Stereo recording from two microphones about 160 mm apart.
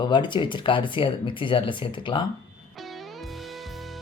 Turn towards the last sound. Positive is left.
turn(degrees=0)  # may be behind; listen again after turning